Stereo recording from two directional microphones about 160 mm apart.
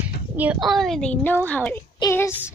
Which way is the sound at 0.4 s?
5° right (ahead or behind).